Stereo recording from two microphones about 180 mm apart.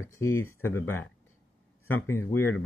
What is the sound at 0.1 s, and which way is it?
Speech, 15° left (ahead or behind).